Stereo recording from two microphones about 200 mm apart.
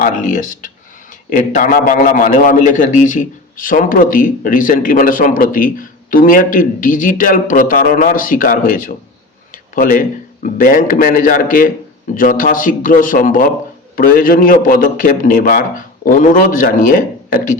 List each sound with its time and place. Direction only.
0.0 s a man's voice: 40° left (ahead or behind)